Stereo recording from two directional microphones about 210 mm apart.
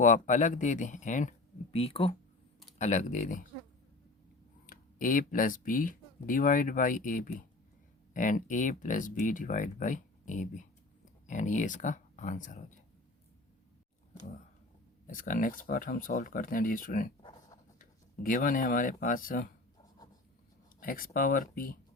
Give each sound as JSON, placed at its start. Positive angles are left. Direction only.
{"t": 0.0, "sound": "speech", "side_deg": 35}
{"t": 4.6, "sound": "speech", "side_deg": 40}
{"t": 15.0, "sound": "speech", "side_deg": 40}
{"t": 20.8, "sound": "speech", "side_deg": 40}